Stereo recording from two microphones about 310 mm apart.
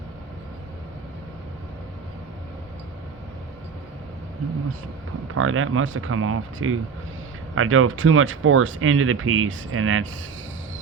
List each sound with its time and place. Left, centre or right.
5.3 s speech: right